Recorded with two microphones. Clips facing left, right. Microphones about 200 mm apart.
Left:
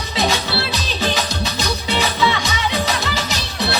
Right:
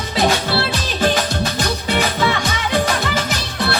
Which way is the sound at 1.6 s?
50° right (ahead or behind).